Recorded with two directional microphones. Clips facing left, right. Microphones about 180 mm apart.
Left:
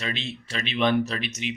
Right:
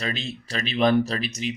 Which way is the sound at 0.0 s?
40° right (ahead or behind).